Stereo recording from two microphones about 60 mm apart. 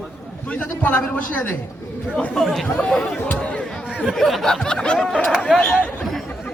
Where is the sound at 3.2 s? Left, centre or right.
Left.